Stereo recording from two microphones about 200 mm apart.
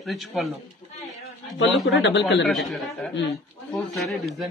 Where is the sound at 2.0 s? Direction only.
60° left (ahead or behind).